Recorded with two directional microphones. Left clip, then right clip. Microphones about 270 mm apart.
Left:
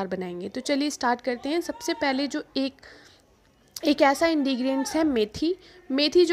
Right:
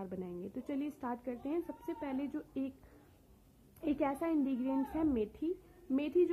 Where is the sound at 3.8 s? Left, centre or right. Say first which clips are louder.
Left 15 dB; left.